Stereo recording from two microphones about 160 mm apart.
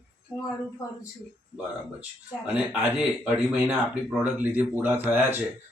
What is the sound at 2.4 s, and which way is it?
Speech, 5° right (ahead or behind).